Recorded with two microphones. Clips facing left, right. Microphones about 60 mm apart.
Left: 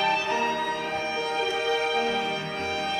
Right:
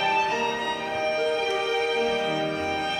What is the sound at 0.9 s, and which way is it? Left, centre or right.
Music, right.